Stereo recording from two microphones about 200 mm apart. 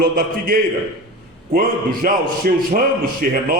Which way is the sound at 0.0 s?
45° right (ahead or behind).